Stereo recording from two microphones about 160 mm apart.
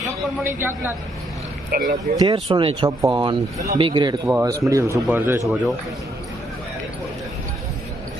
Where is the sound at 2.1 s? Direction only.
30° right (ahead or behind).